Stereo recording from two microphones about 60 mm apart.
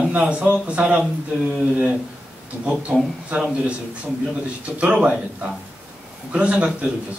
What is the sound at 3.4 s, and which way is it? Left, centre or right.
Speech, centre.